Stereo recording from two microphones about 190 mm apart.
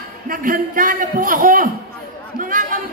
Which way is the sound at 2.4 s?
45° right (ahead or behind).